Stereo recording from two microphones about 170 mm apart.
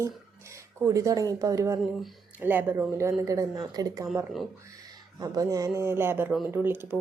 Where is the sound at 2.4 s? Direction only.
10° right (ahead or behind).